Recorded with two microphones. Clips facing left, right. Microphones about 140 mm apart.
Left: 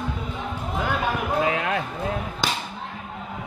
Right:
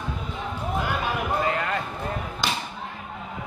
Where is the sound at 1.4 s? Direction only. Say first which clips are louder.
Left 2 dB; 70° left (ahead or behind).